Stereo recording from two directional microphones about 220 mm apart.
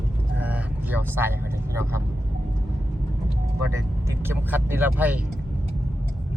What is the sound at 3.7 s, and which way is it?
Speech, 10° right (ahead or behind).